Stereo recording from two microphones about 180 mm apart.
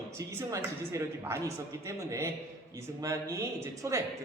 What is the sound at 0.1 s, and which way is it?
A man's voice, 15° right (ahead or behind).